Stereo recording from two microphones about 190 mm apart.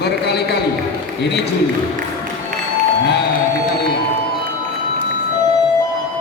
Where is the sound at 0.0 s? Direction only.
60° left (ahead or behind).